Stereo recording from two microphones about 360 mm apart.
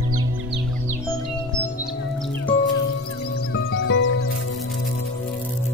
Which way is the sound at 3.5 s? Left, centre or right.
Left.